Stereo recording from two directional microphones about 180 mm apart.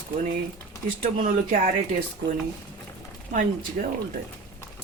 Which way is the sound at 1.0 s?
50° right (ahead or behind).